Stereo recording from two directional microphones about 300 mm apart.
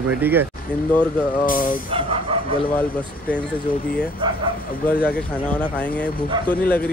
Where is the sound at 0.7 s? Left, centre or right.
Centre.